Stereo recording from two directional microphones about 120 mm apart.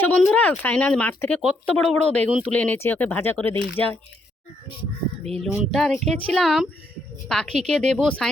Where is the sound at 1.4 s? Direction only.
Centre (ahead or behind).